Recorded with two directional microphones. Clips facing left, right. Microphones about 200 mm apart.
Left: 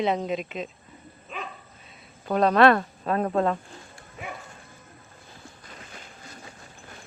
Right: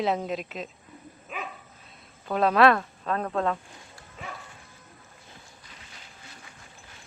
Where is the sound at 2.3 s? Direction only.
Centre (ahead or behind).